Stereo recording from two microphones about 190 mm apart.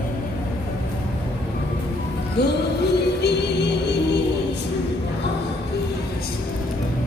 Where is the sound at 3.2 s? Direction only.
60° left (ahead or behind).